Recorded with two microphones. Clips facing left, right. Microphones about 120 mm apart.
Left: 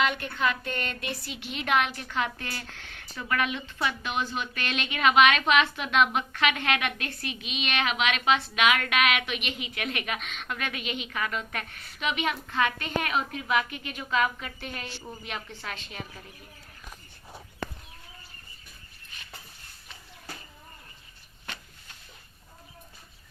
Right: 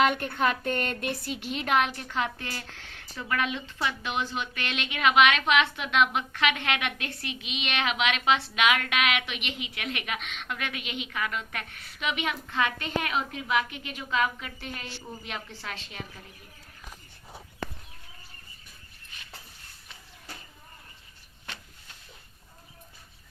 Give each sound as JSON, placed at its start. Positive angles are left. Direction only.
{"t": 0.0, "sound": "a woman's voice", "side_deg": -50}
{"t": 15.1, "sound": "a woman's voice", "side_deg": 15}